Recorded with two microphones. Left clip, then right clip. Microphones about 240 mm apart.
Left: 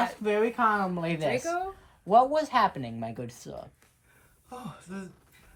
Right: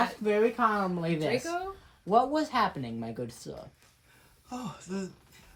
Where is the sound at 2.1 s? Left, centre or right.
Left.